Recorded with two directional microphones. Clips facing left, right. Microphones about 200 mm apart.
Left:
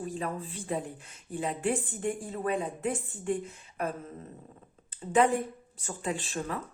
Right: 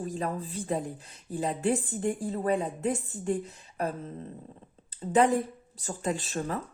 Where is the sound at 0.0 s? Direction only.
40° right (ahead or behind).